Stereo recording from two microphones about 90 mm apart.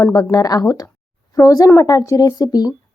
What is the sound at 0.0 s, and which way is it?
A woman's voice, 45° left (ahead or behind).